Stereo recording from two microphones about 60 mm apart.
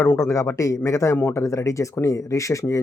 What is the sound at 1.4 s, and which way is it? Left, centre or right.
Speech, left.